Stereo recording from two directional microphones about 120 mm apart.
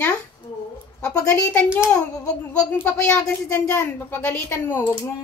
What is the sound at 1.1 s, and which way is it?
Speech, 25° left (ahead or behind).